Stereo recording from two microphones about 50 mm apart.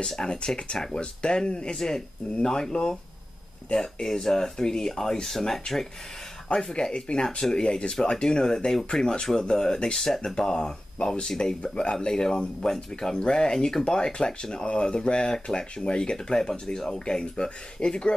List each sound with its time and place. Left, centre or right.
0.0 s speech: centre